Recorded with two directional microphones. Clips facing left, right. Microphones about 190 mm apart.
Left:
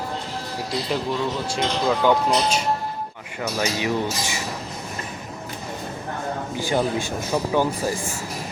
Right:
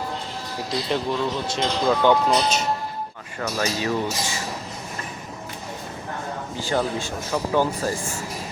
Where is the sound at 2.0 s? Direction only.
10° left (ahead or behind).